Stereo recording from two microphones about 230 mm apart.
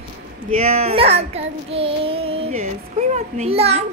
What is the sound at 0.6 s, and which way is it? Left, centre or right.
Child singing, right.